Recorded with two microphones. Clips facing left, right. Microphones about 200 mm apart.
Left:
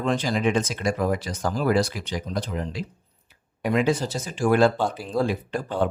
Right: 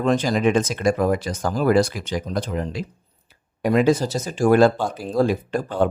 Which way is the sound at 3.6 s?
40° right (ahead or behind).